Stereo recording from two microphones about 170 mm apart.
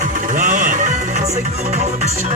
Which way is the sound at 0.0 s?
50° right (ahead or behind).